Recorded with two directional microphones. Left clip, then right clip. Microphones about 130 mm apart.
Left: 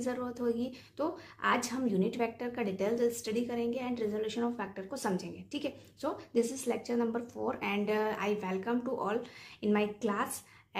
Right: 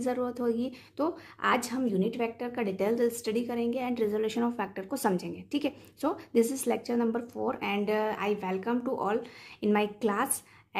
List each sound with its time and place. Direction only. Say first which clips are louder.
0.0 s a woman's voice: right 4 dB; 30° right (ahead or behind)
1.7 s a woman's voice: right 3 dB; 10° right (ahead or behind); by 6.6 s 45° right (ahead or behind)
6.7 s speech: right 3 dB; 20° right (ahead or behind)